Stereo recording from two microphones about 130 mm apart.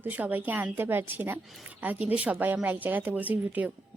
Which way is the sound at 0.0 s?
15° right (ahead or behind).